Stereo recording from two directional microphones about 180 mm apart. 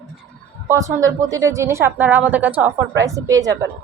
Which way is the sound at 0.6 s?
15° right (ahead or behind).